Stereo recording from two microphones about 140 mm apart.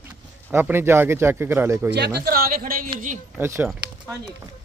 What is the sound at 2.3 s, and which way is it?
Speech, 90° right.